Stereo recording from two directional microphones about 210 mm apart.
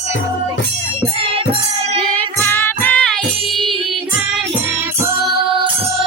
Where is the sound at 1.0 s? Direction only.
25° right (ahead or behind).